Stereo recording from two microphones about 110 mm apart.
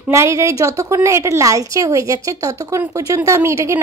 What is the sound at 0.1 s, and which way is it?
A woman's voice, 25° right (ahead or behind).